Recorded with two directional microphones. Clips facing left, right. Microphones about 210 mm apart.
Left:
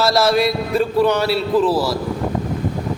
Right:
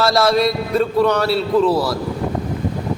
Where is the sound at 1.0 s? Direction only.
5° left (ahead or behind).